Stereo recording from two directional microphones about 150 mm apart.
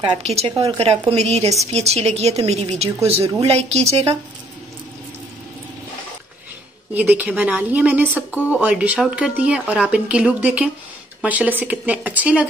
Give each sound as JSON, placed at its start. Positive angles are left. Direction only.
{"t": 0.2, "sound": "a woman's voice", "side_deg": -45}
{"t": 6.9, "sound": "speech", "side_deg": -10}